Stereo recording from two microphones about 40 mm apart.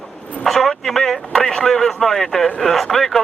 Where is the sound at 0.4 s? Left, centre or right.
Centre.